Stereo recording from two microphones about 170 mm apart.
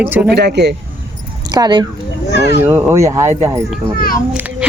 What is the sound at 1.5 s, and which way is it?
Speech, 25° right (ahead or behind).